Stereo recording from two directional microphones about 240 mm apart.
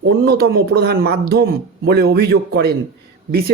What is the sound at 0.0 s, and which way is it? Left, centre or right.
Speech, right.